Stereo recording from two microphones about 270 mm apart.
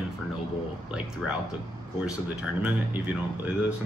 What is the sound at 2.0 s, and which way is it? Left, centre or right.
Speech, centre.